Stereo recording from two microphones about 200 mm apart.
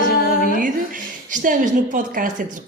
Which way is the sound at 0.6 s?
40° right (ahead or behind).